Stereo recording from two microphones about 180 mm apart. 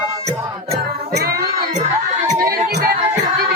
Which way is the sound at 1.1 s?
65° right (ahead or behind).